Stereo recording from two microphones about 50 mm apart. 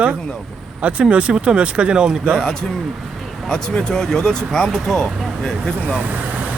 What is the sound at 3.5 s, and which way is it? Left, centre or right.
Speech, centre.